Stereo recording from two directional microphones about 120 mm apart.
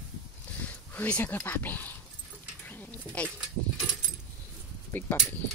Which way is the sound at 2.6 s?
15° left (ahead or behind).